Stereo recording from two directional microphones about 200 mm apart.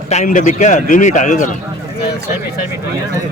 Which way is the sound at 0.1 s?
40° left (ahead or behind).